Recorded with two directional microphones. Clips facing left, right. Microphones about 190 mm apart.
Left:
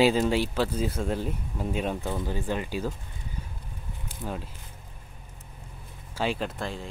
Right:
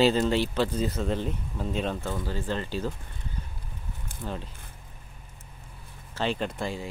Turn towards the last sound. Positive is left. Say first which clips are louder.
# right 1 dB
turn(degrees=0)  # may be behind; listen again after turning